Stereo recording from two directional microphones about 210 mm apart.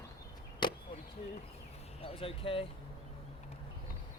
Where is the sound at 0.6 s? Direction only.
20° left (ahead or behind).